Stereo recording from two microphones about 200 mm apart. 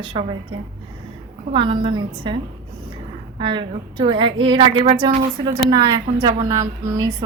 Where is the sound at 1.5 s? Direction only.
25° right (ahead or behind).